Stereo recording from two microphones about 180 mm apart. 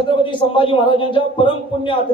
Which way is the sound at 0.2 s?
25° left (ahead or behind).